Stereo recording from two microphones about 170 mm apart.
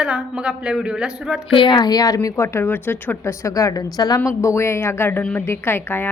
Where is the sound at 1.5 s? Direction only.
30° left (ahead or behind).